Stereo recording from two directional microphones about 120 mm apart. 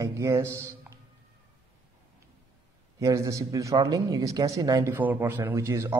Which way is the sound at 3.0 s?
25° right (ahead or behind).